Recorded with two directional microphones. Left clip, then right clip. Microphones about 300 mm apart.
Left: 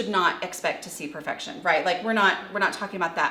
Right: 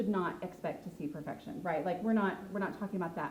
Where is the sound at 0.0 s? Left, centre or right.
Centre.